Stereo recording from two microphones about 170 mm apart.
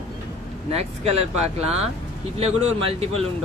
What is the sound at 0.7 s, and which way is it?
Speech, 35° right (ahead or behind).